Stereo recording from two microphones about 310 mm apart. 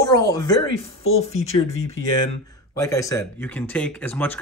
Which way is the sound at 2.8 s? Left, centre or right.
Centre.